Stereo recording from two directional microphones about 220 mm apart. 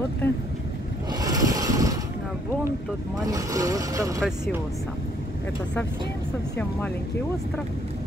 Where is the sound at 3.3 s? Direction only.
15° right (ahead or behind).